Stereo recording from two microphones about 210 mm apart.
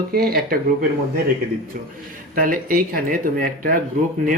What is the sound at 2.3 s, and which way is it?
Speech, 40° right (ahead or behind).